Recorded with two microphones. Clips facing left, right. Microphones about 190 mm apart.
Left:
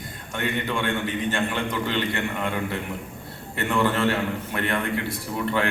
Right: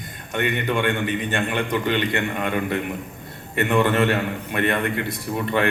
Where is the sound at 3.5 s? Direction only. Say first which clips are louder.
Right 4 dB; 20° right (ahead or behind).